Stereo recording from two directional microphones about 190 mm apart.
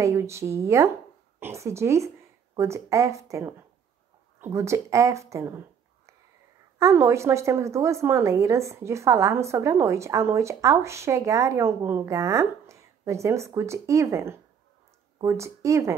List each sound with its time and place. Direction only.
0.0 s a woman's voice: 15° right (ahead or behind)
6.8 s a woman's voice: 15° right (ahead or behind)